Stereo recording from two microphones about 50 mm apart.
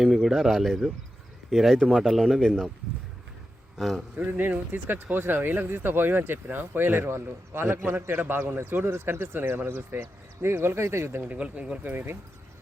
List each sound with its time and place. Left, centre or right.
0.0 s speech: centre
3.8 s speech: centre
4.3 s speech: right
7.8 s speech: right
8.5 s speech: right
11.3 s speech: right
11.9 s speech: right